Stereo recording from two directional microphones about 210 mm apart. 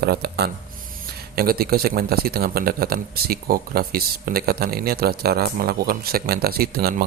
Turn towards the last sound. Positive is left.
turn(degrees=-45)  # may be behind; listen again after turning